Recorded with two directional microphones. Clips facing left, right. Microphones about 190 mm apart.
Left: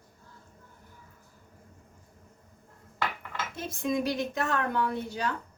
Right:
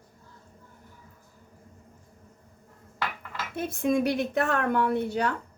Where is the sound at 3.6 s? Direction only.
60° right (ahead or behind).